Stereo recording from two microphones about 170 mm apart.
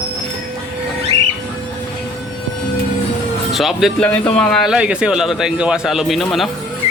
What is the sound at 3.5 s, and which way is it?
A man's voice, centre (ahead or behind).